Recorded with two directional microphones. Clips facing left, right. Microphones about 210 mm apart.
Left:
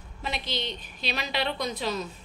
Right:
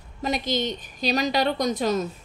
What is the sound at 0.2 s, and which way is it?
A woman's voice, 45° right (ahead or behind).